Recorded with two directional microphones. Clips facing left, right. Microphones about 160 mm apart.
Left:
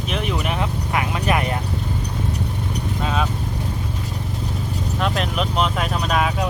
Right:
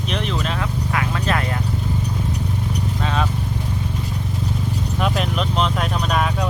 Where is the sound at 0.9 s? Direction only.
15° left (ahead or behind).